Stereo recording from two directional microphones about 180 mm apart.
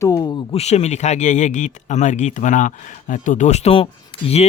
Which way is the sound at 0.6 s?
35° left (ahead or behind).